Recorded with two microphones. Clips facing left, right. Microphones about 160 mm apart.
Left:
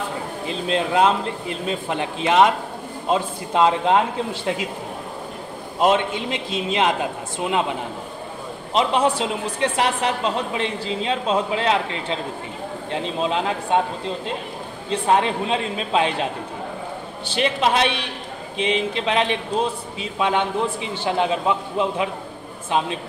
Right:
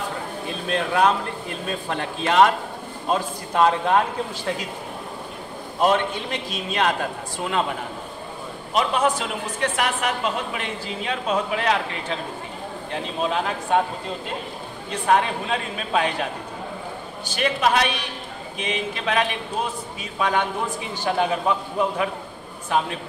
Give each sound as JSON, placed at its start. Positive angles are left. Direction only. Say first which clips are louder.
{"t": 0.5, "sound": "a man's voice", "louder": "left 3 dB", "side_deg": 20}
{"t": 5.8, "sound": "a man's voice", "louder": "left 2 dB", "side_deg": 20}
{"t": 8.7, "sound": "a man's voice", "louder": "left 2 dB", "side_deg": 30}
{"t": 14.9, "sound": "a man's voice", "louder": "left 1 dB", "side_deg": 25}
{"t": 17.4, "sound": "a man's voice", "louder": "left 1 dB", "side_deg": 25}